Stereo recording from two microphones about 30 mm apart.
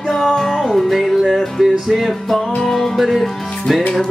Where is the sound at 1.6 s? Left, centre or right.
Centre.